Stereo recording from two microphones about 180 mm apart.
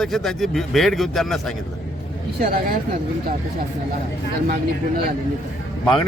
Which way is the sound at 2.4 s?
50° right (ahead or behind).